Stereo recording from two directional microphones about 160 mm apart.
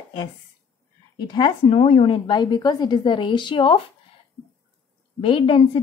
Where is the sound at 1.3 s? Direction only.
25° left (ahead or behind).